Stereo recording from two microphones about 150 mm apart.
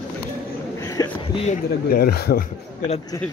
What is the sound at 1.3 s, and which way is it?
Speech, 45° left (ahead or behind).